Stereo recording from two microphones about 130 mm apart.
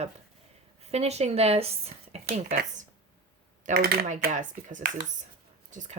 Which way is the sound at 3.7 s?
70° right (ahead or behind).